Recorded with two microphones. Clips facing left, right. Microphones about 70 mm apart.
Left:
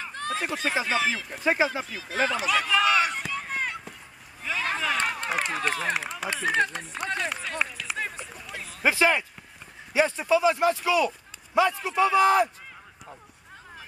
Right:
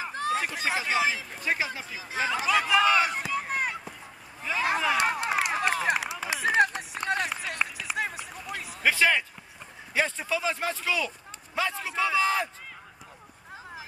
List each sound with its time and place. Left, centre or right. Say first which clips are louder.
0.0 s a sound: right 2 dB; centre
0.8 s a man's voice: even; centre
1.4 s speech: left 6 dB; left
1.9 s speech: left 2 dB; centre
2.2 s run: even; centre
4.4 s a sound: right 2 dB; centre
6.3 s speech: right 2 dB; centre
7.0 s run: right 1 dB; centre
8.8 s speech: left 1 dB; left
11.5 s a man's voice: left 7 dB; centre
12.0 s speech: left 6 dB; centre